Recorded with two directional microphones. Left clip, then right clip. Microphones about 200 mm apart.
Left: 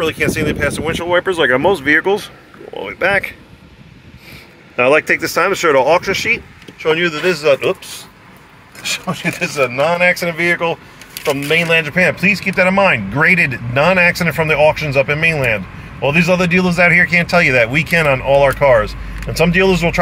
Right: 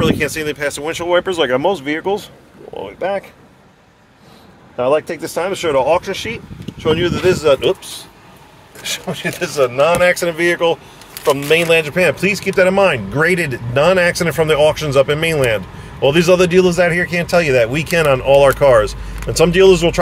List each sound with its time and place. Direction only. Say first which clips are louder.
0.0 s speech: left 1 dB; centre (ahead or behind)
4.8 s speech: left 4 dB; centre (ahead or behind)
6.8 s speech: left 1 dB; 10° right (ahead or behind)
9.1 s a man's voice: right 2 dB; 5° right (ahead or behind)